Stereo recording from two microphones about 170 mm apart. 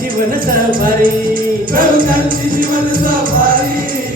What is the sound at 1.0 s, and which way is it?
Music, 55° right (ahead or behind).